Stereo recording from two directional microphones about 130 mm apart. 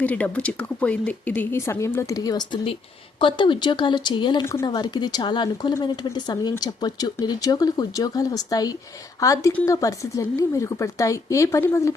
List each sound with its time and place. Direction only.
0.0 s speech: 10° left (ahead or behind)